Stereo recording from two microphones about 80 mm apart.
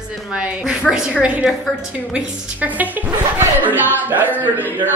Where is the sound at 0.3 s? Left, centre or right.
Centre.